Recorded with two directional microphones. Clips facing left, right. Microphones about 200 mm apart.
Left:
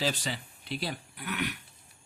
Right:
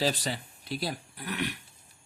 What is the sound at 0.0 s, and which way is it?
Speech, 40° right (ahead or behind).